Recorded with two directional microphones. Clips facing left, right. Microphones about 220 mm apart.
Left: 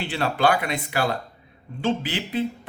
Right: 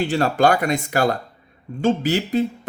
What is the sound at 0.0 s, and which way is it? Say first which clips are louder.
Speech: right 5 dB; 45° right (ahead or behind).